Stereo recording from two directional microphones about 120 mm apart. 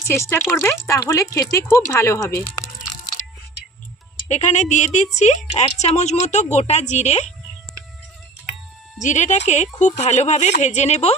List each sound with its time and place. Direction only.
0.0 s speech: 20° left (ahead or behind)
4.3 s a woman's voice: 75° left (ahead or behind)
9.0 s a woman's voice: 85° left; by 11.1 s 65° left (ahead or behind)